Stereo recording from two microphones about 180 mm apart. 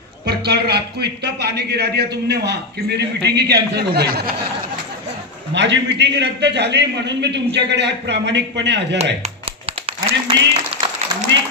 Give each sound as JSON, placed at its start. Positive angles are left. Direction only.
{"t": 0.2, "sound": "a man's voice", "side_deg": -65}
{"t": 5.5, "sound": "a man's voice", "side_deg": -80}
{"t": 9.8, "sound": "a sound", "side_deg": -30}